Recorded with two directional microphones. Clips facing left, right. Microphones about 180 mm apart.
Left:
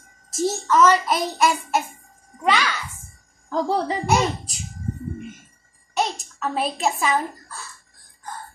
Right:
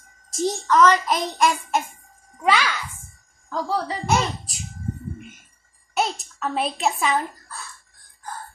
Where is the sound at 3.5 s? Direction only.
25° left (ahead or behind).